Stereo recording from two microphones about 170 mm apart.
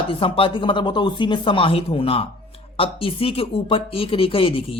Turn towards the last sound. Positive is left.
turn(degrees=30)  # may be behind; listen again after turning